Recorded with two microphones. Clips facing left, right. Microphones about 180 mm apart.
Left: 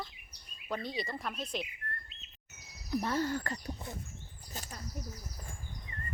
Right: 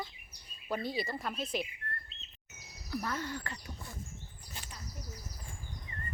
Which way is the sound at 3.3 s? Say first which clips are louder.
Left 5 dB; 40° left (ahead or behind).